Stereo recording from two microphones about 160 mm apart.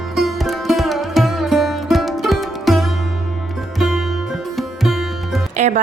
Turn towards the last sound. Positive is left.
turn(degrees=-45)  # may be behind; listen again after turning